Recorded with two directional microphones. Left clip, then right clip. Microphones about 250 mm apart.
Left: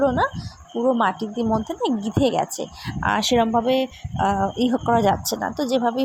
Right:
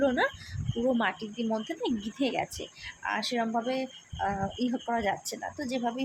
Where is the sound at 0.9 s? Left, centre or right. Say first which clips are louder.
Left 9 dB; centre.